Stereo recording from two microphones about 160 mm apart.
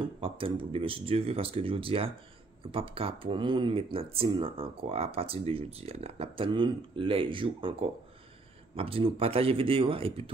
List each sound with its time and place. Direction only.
0.0 s speech: 35° right (ahead or behind)